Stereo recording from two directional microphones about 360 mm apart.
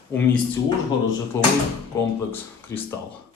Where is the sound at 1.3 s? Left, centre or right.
Centre.